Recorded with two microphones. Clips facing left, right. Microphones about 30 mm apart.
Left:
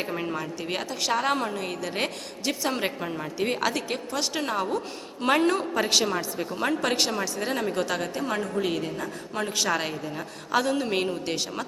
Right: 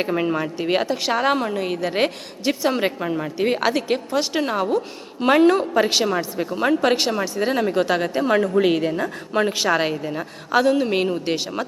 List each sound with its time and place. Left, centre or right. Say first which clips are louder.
0.0 s a woman's voice: right 8 dB; right